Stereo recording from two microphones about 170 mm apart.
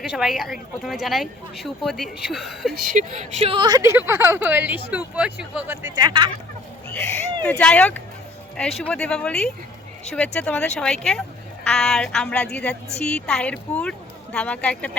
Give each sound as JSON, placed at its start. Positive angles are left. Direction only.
{"t": 0.0, "sound": "speech", "side_deg": -5}
{"t": 2.7, "sound": "a woman's voice", "side_deg": -50}
{"t": 5.9, "sound": "a woman's voice", "side_deg": -25}
{"t": 7.4, "sound": "speech", "side_deg": 5}